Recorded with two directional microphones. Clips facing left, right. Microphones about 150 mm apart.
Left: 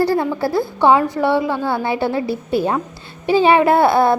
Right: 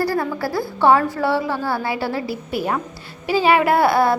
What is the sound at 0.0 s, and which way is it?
A woman's voice, 25° left (ahead or behind).